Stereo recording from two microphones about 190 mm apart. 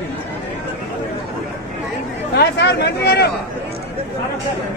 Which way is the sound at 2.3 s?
60° left (ahead or behind).